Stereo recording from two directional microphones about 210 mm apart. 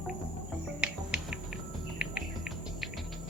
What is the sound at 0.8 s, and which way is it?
Insect, 5° right (ahead or behind).